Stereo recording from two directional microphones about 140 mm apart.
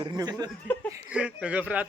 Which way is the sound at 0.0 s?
30° right (ahead or behind).